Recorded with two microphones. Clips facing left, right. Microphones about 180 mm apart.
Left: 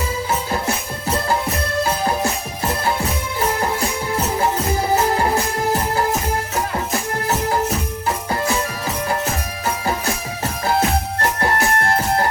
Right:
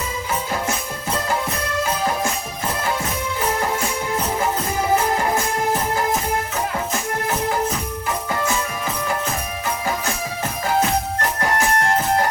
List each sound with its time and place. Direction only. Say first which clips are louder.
1.8 s music: left 2 dB; 35° left (ahead or behind)
8.0 s music: left 2 dB; 35° left (ahead or behind)
10.8 s music: right 2 dB; 35° left (ahead or behind)